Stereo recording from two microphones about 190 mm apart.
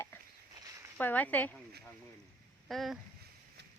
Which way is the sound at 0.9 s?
10° left (ahead or behind).